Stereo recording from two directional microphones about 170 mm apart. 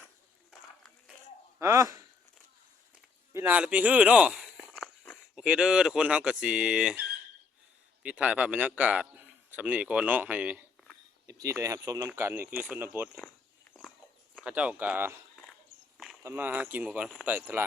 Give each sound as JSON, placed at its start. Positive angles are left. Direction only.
{"t": 1.5, "sound": "speech", "side_deg": -15}
{"t": 3.3, "sound": "speech", "side_deg": -10}
{"t": 8.0, "sound": "a man's voice", "side_deg": -10}
{"t": 11.3, "sound": "speech", "side_deg": -20}
{"t": 14.4, "sound": "speech", "side_deg": -10}
{"t": 16.2, "sound": "speech", "side_deg": -10}